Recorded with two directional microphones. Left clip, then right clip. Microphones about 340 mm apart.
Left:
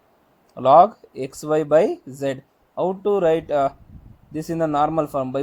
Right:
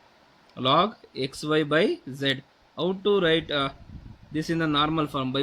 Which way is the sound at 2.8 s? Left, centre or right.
Left.